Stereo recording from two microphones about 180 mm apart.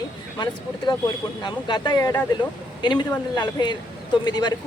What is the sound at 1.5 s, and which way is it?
Speech, 25° left (ahead or behind).